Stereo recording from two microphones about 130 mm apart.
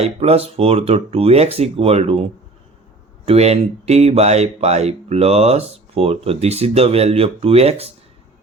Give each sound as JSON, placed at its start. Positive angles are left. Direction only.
{"t": 0.0, "sound": "speech", "side_deg": -50}
{"t": 3.2, "sound": "speech", "side_deg": -55}